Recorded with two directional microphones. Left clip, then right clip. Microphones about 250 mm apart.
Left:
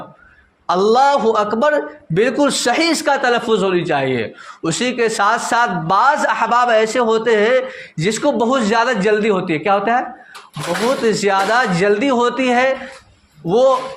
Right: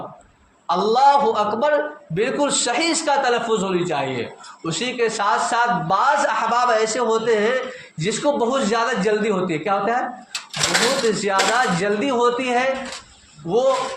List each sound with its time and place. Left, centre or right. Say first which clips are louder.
0.7 s a man's voice: left 2 dB; left
11.1 s a man's voice: left 4 dB; left